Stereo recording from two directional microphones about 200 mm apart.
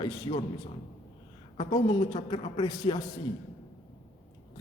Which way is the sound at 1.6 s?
25° left (ahead or behind).